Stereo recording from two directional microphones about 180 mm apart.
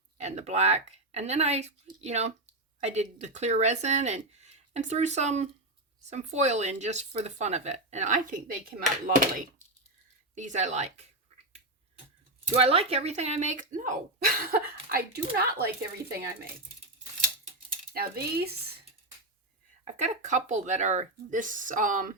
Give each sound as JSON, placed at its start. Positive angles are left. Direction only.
{"t": 0.2, "sound": "speech", "side_deg": -40}
{"t": 12.5, "sound": "speech", "side_deg": -35}
{"t": 17.9, "sound": "speech", "side_deg": -55}
{"t": 20.0, "sound": "speech", "side_deg": -40}